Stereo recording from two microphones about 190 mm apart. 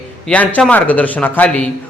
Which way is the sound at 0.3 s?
5° left (ahead or behind).